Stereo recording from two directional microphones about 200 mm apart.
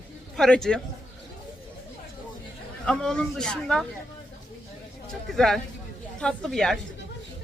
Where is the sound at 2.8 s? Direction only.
5° left (ahead or behind).